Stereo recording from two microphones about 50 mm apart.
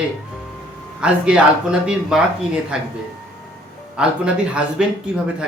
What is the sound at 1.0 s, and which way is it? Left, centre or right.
Speech, centre.